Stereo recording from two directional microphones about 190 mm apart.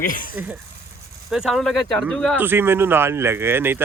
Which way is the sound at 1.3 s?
Centre (ahead or behind).